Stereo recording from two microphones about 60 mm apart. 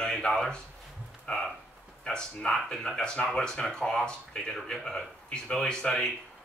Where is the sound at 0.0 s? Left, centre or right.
Centre.